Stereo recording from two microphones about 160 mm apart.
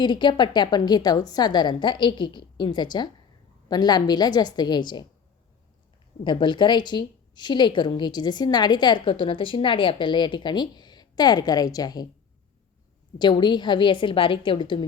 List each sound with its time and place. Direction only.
0.0 s a woman's voice: 30° left (ahead or behind)
6.2 s a woman's voice: 30° left (ahead or behind)
13.1 s a woman's voice: 30° left (ahead or behind)